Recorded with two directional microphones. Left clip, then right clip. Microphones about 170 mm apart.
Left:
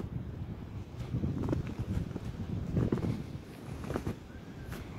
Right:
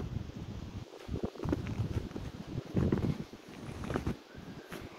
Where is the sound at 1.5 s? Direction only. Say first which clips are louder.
Right 2 dB; 5° right (ahead or behind).